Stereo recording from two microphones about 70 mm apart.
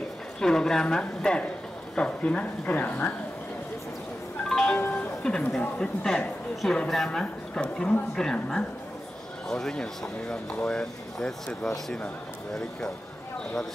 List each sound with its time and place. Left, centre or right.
0.4 s speech: centre; by 2.9 s left
4.5 s music: centre
5.6 s speech: centre